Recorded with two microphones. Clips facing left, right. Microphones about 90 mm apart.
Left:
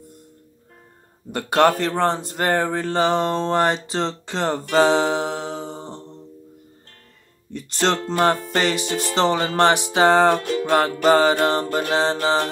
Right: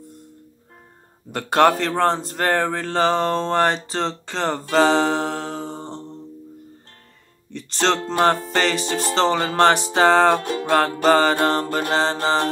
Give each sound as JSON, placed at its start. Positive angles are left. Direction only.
{"t": 1.3, "sound": "speech", "side_deg": 0}
{"t": 7.5, "sound": "speech", "side_deg": 5}
{"t": 8.5, "sound": "mantra", "side_deg": 10}
{"t": 8.8, "sound": "speech", "side_deg": -45}
{"t": 9.1, "sound": "mantra", "side_deg": 5}
{"t": 10.3, "sound": "music", "side_deg": -35}
{"t": 11.1, "sound": "mantra", "side_deg": 5}
{"t": 11.4, "sound": "speech", "side_deg": 5}
{"t": 11.9, "sound": "mantra", "side_deg": 10}